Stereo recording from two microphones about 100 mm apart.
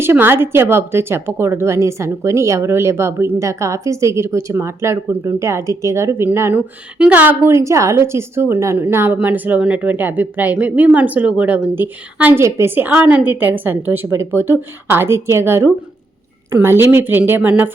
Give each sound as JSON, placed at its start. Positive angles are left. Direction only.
{"t": 0.0, "sound": "a woman's voice", "side_deg": -25}
{"t": 7.5, "sound": "a woman's voice", "side_deg": -30}